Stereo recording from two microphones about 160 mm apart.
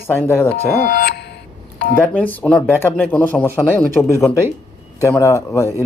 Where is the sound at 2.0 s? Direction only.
10° left (ahead or behind).